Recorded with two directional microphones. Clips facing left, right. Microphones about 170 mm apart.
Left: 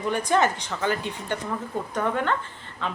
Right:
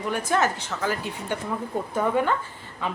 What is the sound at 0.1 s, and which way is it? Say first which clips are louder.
A woman's voice: left 2 dB; 5° right (ahead or behind).